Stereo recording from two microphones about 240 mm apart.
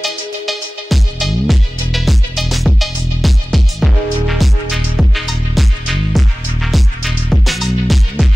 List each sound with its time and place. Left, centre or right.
0.0 s music: centre